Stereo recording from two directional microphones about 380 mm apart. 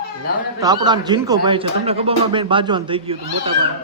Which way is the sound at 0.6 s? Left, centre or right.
Centre.